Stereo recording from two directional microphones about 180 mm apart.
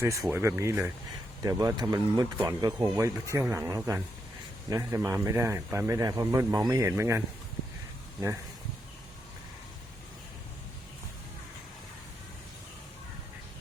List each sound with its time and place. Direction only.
0.0 s a man's voice: 15° right (ahead or behind)